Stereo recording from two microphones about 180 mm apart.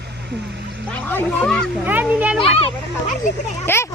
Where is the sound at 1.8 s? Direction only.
10° right (ahead or behind).